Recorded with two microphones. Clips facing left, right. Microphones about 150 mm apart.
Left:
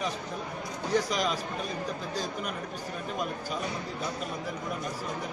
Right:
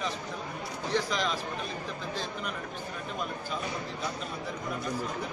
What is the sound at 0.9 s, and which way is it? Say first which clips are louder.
Speech: left 2 dB; 40° left (ahead or behind).